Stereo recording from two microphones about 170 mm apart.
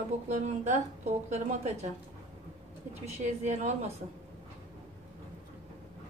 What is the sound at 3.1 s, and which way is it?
Speech, 40° right (ahead or behind).